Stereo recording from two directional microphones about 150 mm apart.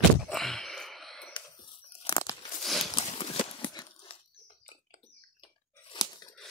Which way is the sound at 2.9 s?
35° left (ahead or behind).